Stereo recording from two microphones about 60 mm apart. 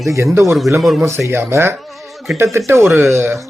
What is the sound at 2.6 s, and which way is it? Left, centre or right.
Speech, right.